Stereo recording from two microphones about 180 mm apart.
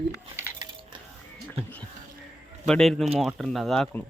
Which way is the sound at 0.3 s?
10° right (ahead or behind).